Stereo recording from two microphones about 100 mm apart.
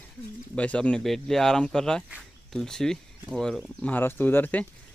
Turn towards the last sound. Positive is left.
turn(degrees=15)  # may be behind; listen again after turning